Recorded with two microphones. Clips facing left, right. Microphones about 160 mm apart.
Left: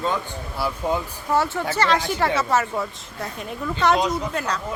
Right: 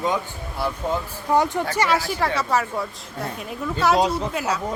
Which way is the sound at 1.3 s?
15° right (ahead or behind).